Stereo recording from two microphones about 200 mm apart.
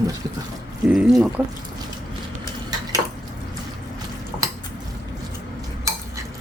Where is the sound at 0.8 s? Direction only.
5° right (ahead or behind).